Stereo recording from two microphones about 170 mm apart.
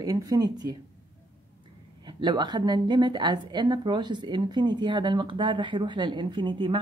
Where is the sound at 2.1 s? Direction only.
25° right (ahead or behind).